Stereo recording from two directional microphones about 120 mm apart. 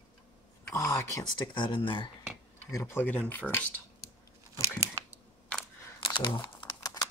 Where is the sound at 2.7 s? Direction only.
20° left (ahead or behind).